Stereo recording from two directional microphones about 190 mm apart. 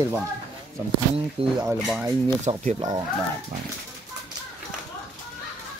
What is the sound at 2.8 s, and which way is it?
Speech, 20° right (ahead or behind).